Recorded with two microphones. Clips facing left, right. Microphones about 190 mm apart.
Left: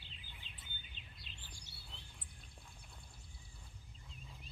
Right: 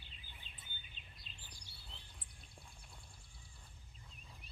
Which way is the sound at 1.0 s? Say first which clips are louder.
Left 2 dB; 45° right (ahead or behind).